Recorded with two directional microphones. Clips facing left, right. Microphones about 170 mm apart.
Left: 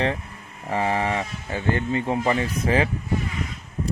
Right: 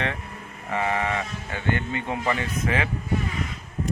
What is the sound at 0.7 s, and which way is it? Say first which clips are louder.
Speech: left 2 dB; 30° left (ahead or behind).